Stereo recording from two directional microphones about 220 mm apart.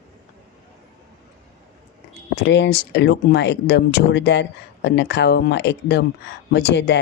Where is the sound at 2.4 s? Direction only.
50° left (ahead or behind).